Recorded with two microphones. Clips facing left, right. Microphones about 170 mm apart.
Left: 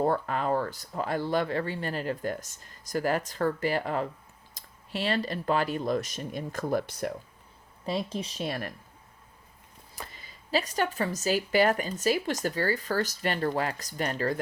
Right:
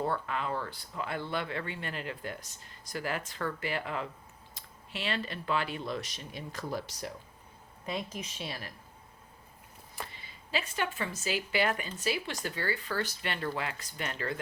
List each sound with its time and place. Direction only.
0.0 s speech: 40° left (ahead or behind)
7.9 s speech: 35° left (ahead or behind)
8.4 s speech: 55° left (ahead or behind)
9.9 s speech: 40° left (ahead or behind)